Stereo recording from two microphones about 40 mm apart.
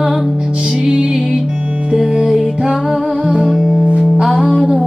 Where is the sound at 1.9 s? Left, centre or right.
Centre.